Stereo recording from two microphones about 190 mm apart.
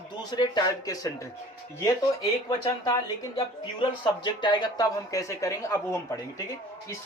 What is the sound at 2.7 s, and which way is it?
Speech, 20° left (ahead or behind).